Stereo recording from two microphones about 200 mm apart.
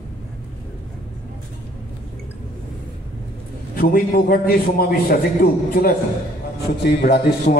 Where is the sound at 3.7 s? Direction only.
45° left (ahead or behind).